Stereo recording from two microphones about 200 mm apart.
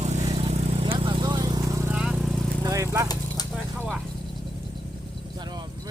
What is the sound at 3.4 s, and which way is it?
Vehicle, 20° left (ahead or behind).